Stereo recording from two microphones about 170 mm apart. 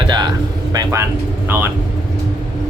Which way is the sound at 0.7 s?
20° right (ahead or behind).